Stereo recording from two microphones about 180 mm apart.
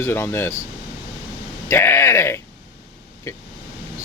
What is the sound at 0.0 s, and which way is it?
Speech, 15° left (ahead or behind).